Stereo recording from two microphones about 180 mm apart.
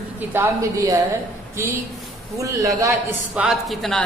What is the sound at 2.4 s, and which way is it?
Speech, 20° right (ahead or behind).